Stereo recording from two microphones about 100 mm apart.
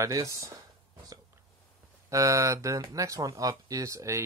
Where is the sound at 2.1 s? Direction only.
35° right (ahead or behind).